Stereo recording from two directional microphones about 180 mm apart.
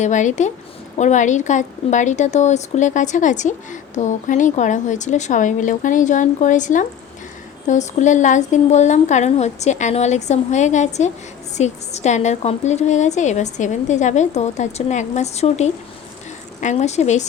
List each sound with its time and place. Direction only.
0.0 s a woman's voice: 45° left (ahead or behind)